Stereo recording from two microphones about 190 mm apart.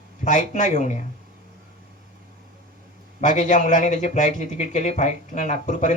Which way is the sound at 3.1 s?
40° left (ahead or behind).